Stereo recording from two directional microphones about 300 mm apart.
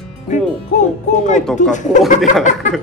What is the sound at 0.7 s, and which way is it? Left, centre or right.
A man's voice, left.